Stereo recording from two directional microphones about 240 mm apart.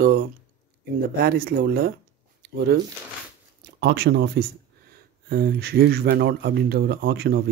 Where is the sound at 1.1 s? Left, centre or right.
Right.